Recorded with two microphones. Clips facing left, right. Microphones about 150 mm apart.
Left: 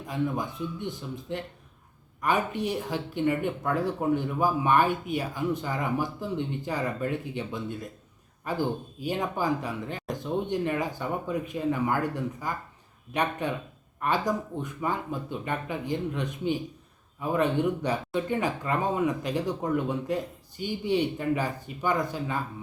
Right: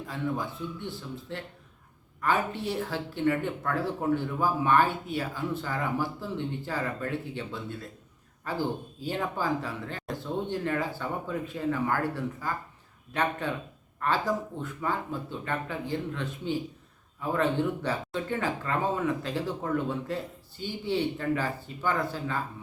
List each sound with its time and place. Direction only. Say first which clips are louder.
0.1 s speech: left 3 dB; 15° left (ahead or behind)